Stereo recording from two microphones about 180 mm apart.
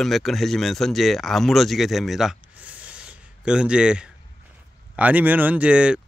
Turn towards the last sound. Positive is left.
turn(degrees=-5)  # may be behind; listen again after turning